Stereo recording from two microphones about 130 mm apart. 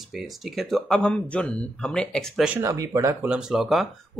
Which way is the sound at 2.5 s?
25° right (ahead or behind).